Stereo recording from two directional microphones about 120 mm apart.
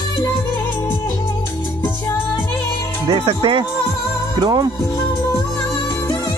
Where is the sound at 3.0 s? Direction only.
50° right (ahead or behind).